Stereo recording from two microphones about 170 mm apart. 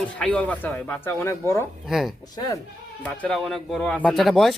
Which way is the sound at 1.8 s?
Centre (ahead or behind).